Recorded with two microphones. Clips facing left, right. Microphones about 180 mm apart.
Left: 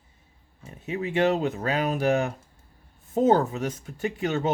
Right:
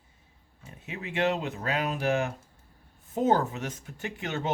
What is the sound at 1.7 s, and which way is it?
Speech, 40° left (ahead or behind).